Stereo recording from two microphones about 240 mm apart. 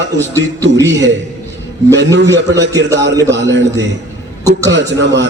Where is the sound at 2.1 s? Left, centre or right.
Right.